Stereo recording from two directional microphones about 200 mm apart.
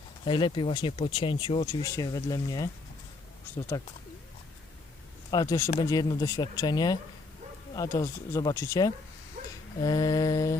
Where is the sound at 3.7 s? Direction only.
15° left (ahead or behind).